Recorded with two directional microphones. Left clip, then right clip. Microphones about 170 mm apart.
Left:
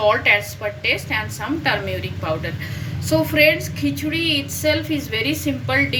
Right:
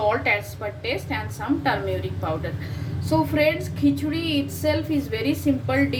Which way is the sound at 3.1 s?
15° right (ahead or behind).